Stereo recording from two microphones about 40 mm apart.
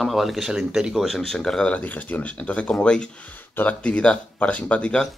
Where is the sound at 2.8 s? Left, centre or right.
Left.